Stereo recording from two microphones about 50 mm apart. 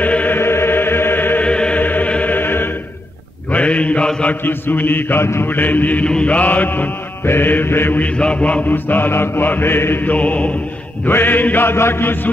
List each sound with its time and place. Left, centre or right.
0.0 s music: left
0.4 s music: left
1.4 s music: left
1.8 s music: left
2.3 s choir: left
3.5 s mantra: left
4.4 s mantra: left
6.0 s mantra: left
8.0 s mantra: left
8.6 s mantra: left
10.0 s mantra: left
11.1 s mantra: left